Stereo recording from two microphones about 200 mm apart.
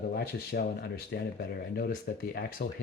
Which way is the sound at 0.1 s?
50° left (ahead or behind).